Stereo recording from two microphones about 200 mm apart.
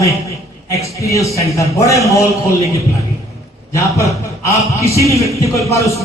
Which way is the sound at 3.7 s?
15° left (ahead or behind).